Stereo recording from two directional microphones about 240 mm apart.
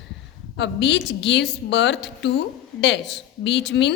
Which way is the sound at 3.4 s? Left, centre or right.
Left.